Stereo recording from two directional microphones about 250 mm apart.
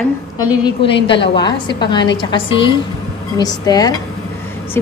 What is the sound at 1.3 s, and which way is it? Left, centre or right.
A woman's voice, centre.